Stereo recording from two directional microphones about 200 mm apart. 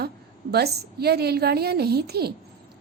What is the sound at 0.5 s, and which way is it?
A woman's voice, 50° right (ahead or behind).